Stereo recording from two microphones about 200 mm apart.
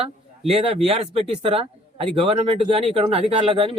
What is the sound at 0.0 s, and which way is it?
Speech, 30° right (ahead or behind).